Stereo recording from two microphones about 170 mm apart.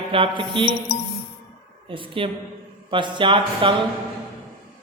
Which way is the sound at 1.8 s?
30° right (ahead or behind).